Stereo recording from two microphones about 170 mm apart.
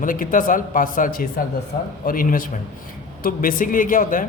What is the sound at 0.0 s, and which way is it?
A man's voice, 55° left (ahead or behind).